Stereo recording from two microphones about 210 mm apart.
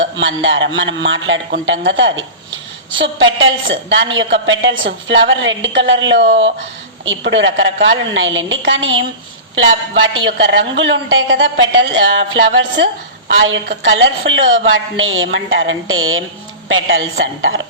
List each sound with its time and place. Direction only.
0.0 s a man's voice: 60° right (ahead or behind)
10.2 s a woman's voice: 65° right (ahead or behind)